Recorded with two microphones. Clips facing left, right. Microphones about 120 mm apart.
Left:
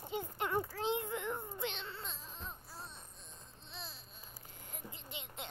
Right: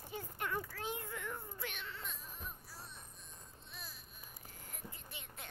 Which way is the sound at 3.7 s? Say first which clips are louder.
Left 4 dB; 25° left (ahead or behind).